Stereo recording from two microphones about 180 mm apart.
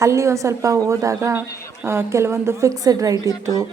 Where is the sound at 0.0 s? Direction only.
15° right (ahead or behind).